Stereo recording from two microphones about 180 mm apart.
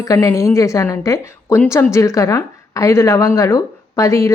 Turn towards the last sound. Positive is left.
turn(degrees=15)  # may be behind; listen again after turning